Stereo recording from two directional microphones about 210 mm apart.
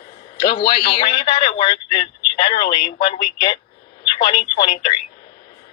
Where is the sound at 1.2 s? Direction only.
25° left (ahead or behind).